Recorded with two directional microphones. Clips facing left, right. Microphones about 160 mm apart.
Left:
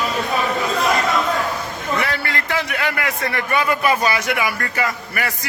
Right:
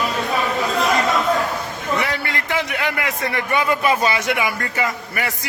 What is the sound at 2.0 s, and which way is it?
A man's voice, 20° right (ahead or behind).